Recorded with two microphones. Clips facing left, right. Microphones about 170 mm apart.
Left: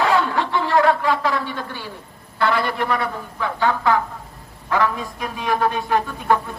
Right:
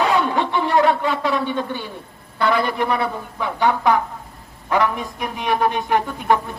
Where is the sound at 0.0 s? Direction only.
20° right (ahead or behind).